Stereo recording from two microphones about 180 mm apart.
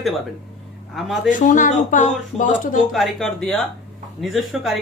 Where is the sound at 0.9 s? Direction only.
Centre (ahead or behind).